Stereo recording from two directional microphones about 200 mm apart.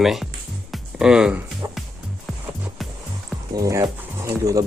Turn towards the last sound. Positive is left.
turn(degrees=-15)  # may be behind; listen again after turning